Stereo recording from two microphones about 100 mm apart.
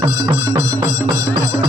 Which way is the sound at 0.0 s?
40° right (ahead or behind).